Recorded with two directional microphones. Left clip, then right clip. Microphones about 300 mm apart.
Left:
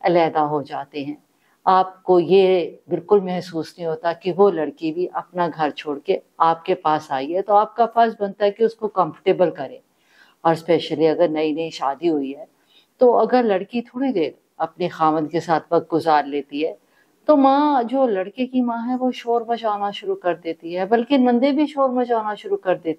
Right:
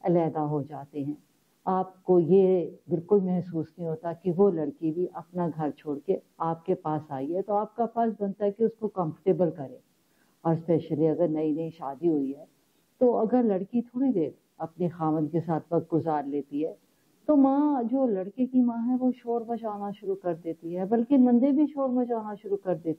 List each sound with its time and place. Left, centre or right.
0.0 s speech: centre
13.2 s speech: centre
15.7 s speech: centre
16.0 s speech: centre